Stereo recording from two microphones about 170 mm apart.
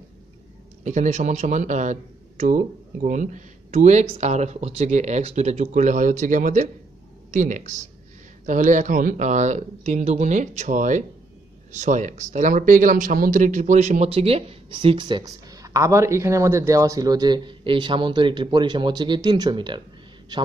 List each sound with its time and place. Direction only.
0.8 s speech: 45° right (ahead or behind); by 19.8 s 25° right (ahead or behind)